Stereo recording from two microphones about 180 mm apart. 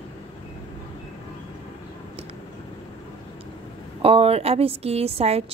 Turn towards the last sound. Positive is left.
turn(degrees=-35)  # may be behind; listen again after turning